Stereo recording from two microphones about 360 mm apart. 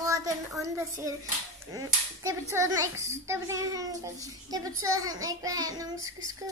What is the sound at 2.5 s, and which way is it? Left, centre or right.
A child's voice, centre.